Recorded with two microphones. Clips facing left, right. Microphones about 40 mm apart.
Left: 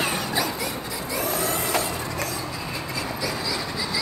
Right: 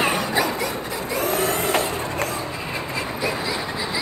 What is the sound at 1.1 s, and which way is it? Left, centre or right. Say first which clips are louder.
Vacuum cleaner: right 4 dB; right.